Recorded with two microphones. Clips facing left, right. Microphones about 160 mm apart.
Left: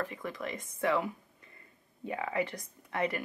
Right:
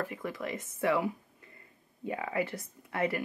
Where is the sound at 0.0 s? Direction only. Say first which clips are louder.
Right 1 dB; 10° right (ahead or behind).